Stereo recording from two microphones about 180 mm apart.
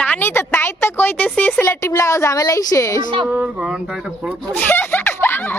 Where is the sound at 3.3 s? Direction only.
5° right (ahead or behind).